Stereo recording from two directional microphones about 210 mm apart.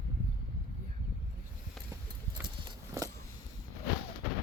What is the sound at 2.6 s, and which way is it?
Horse, 20° right (ahead or behind).